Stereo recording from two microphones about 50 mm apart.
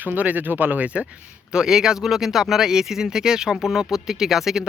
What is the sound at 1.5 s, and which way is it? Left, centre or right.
Speech, centre.